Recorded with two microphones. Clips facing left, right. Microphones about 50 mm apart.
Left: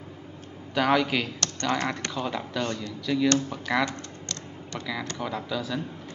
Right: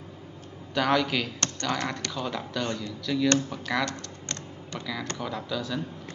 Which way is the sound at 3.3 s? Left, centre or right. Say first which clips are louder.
Left 2 dB; centre.